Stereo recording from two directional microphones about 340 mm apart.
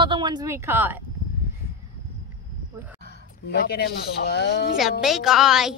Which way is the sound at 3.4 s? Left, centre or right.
Left.